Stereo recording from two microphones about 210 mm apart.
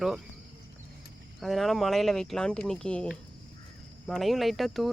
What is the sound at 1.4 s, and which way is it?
Speech, centre (ahead or behind).